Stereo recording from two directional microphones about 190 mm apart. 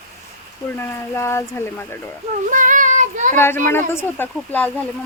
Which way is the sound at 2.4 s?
45° right (ahead or behind).